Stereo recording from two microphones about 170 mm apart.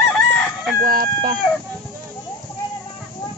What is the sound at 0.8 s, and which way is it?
Speech, 55° right (ahead or behind).